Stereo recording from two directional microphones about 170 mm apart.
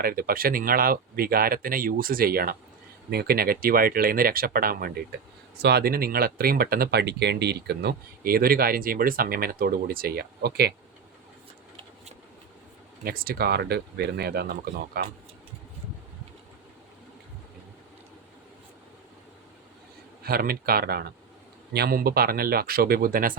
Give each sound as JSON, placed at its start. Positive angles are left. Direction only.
{"t": 0.0, "sound": "speech", "side_deg": -60}
{"t": 5.5, "sound": "speech", "side_deg": -75}
{"t": 13.1, "sound": "speech", "side_deg": -60}
{"t": 20.2, "sound": "speech", "side_deg": -60}